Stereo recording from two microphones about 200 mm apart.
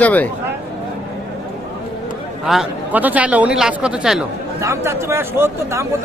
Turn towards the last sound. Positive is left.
turn(degrees=-15)  # may be behind; listen again after turning